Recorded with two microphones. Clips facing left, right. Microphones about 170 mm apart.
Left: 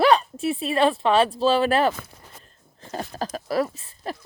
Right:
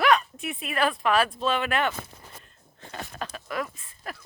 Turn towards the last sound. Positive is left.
turn(degrees=30)  # may be behind; listen again after turning